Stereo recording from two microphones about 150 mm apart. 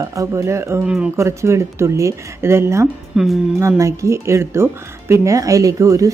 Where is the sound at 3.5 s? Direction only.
20° right (ahead or behind).